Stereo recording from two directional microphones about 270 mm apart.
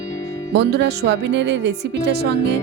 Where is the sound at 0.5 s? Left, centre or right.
Right.